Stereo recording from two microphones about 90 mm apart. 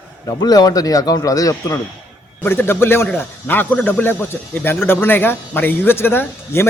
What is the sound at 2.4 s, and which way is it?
Speech, 25° left (ahead or behind).